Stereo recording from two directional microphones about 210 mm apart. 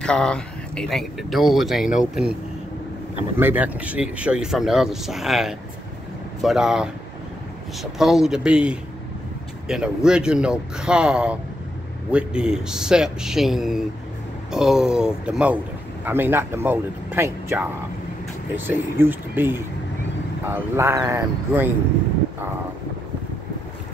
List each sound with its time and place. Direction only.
0.0 s speech: 5° left (ahead or behind)
3.3 s speech: 10° right (ahead or behind)
18.7 s speech: 10° right (ahead or behind)